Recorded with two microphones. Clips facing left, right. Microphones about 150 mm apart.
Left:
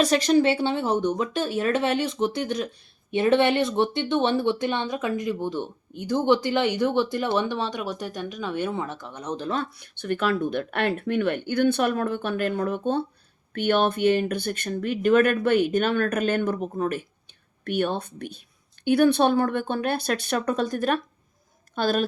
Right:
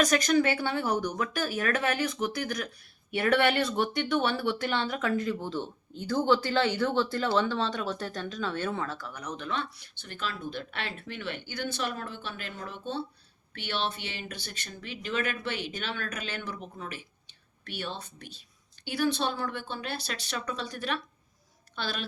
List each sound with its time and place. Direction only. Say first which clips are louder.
0.0 s speech: left 5 dB; 30° left (ahead or behind)
9.7 s speech: left 17 dB; 60° left (ahead or behind)